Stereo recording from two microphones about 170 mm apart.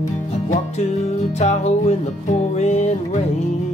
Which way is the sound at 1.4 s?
40° left (ahead or behind).